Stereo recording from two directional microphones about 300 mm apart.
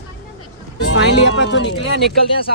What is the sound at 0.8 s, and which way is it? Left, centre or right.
Speech, left.